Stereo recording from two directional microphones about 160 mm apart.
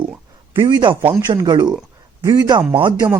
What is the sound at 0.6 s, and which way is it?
Speech, 25° right (ahead or behind).